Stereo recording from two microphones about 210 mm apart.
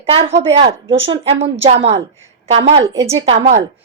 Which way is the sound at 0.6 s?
65° right (ahead or behind).